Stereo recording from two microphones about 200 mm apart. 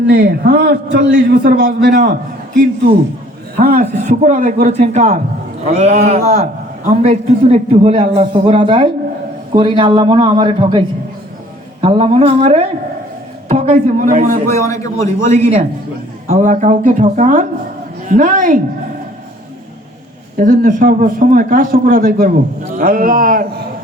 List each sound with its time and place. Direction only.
0.1 s a man's voice: 50° right (ahead or behind)
3.6 s a man's voice: 40° right (ahead or behind)
20.3 s a man's voice: 40° right (ahead or behind)